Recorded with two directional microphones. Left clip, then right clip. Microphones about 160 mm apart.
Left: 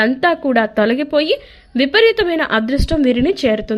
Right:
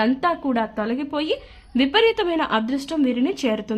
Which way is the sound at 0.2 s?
20° left (ahead or behind).